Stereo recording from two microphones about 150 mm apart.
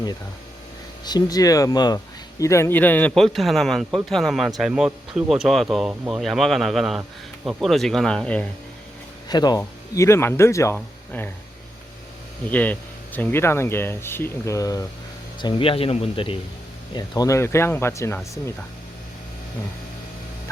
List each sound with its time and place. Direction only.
1.0 s a man's voice: 25° left (ahead or behind); by 8.4 s 5° left (ahead or behind)
9.3 s speech: 25° left (ahead or behind)
12.5 s speech: 10° left (ahead or behind); by 16.4 s 35° left (ahead or behind)
16.9 s speech: 25° left (ahead or behind)